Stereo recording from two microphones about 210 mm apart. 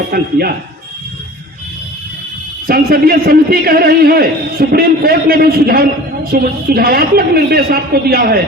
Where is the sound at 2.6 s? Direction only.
45° right (ahead or behind).